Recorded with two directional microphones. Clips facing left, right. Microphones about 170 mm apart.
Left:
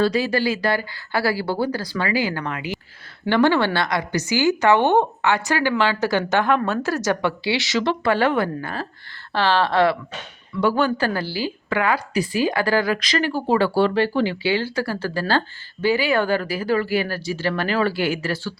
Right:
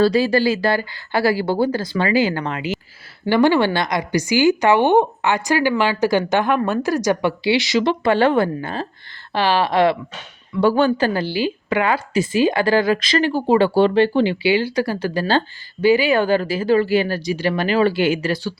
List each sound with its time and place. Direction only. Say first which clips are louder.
0.0 s a woman's voice: right 4 dB; 30° right (ahead or behind)
3.2 s a woman's voice: right 3 dB; 10° right (ahead or behind)
10.6 s a woman's voice: right 4 dB; 30° right (ahead or behind)